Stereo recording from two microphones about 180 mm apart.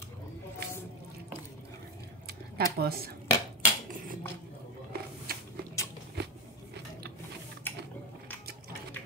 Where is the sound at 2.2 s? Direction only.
60° right (ahead or behind).